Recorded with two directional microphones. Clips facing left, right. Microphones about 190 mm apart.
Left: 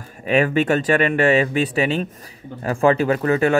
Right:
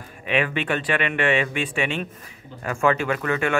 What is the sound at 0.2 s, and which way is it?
Speech, 40° left (ahead or behind).